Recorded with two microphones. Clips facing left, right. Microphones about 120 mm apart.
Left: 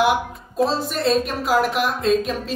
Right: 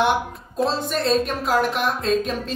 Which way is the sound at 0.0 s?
5° left (ahead or behind).